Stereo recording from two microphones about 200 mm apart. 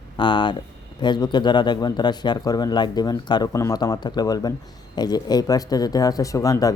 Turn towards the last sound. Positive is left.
turn(degrees=15)  # may be behind; listen again after turning